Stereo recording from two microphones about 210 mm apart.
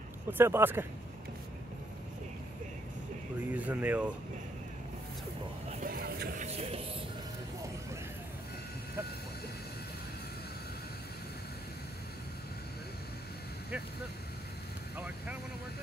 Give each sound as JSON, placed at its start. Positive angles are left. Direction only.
{"t": 0.3, "sound": "speech", "side_deg": -10}
{"t": 3.3, "sound": "speech", "side_deg": -5}
{"t": 5.7, "sound": "vehicle", "side_deg": -40}
{"t": 15.0, "sound": "vehicle", "side_deg": -5}